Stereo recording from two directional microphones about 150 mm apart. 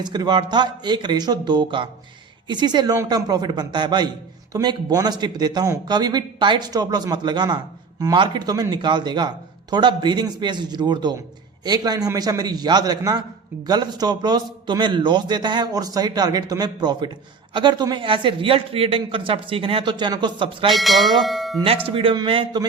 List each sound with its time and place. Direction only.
0.0 s a man's voice: 30° right (ahead or behind)
20.7 s bell: centre (ahead or behind)
21.8 s a man's voice: 35° right (ahead or behind)